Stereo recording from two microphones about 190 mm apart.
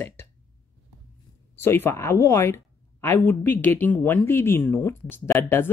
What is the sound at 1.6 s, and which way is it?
Speech, 10° left (ahead or behind).